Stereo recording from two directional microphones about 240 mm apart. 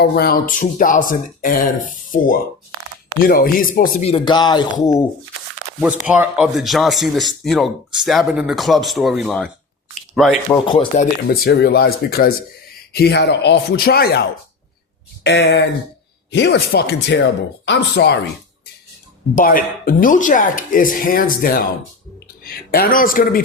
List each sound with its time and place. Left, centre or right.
0.0 s speech: left
4.1 s speech: centre
5.8 s speech: centre
10.7 s speech: left
19.4 s a man's voice: left